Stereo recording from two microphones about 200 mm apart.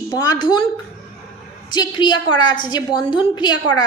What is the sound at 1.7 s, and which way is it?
A woman's voice, 20° left (ahead or behind).